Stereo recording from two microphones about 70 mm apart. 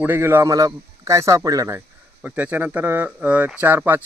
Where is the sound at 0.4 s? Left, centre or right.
Right.